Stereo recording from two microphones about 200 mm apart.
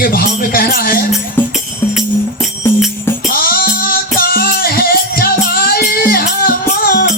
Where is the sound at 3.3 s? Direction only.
45° left (ahead or behind).